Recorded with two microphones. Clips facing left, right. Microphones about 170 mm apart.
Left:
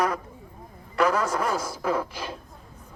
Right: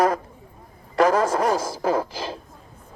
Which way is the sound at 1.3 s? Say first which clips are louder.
Right 5 dB; 35° right (ahead or behind).